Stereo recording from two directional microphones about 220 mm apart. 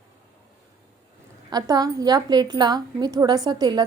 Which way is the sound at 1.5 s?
15° right (ahead or behind).